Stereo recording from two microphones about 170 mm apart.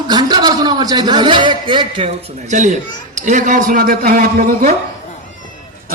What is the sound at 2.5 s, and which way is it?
A man's voice, 45° right (ahead or behind).